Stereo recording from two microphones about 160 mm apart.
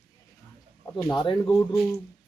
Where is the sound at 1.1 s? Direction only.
30° left (ahead or behind).